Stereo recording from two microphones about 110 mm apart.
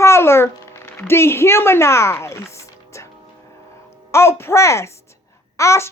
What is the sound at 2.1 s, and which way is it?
Music, 25° left (ahead or behind).